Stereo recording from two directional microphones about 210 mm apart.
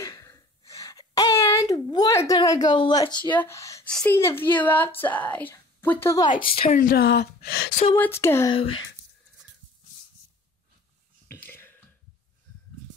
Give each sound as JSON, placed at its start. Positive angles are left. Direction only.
{"t": 0.0, "sound": "a sound", "side_deg": 15}
{"t": 2.7, "sound": "a woman's voice", "side_deg": 20}
{"t": 6.4, "sound": "a woman's voice", "side_deg": 25}
{"t": 6.8, "sound": "speech", "side_deg": 50}
{"t": 7.9, "sound": "speech", "side_deg": 10}
{"t": 8.5, "sound": "a woman's voice", "side_deg": 25}
{"t": 11.2, "sound": "burping", "side_deg": 10}